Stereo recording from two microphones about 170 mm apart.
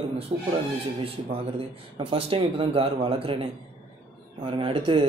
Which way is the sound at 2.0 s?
30° right (ahead or behind).